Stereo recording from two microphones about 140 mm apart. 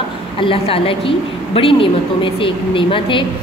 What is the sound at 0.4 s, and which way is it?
A woman's voice, 40° left (ahead or behind).